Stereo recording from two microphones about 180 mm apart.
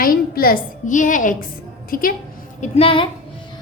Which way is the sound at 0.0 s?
55° left (ahead or behind).